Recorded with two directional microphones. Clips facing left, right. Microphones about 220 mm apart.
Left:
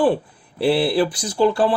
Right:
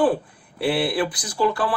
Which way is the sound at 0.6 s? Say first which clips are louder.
Left 4 dB; 25° left (ahead or behind).